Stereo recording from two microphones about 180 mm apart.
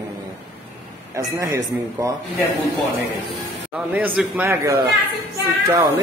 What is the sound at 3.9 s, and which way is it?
Speech, 10° right (ahead or behind).